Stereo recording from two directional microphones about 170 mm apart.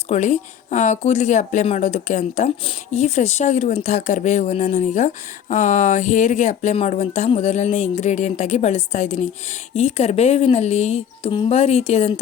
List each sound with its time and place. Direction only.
0.1 s speech: 45° left (ahead or behind)